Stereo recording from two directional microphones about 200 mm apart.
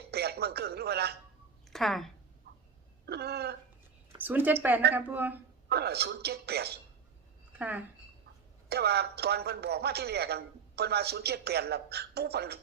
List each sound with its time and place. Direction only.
0.1 s speech: 55° right (ahead or behind)
1.7 s speech: centre (ahead or behind)
3.1 s a man's voice: 55° right (ahead or behind)
4.2 s a woman's voice: 10° right (ahead or behind)
5.6 s a man's voice: 55° right (ahead or behind)
7.6 s speech: 5° right (ahead or behind)
8.7 s a man's voice: 55° right (ahead or behind)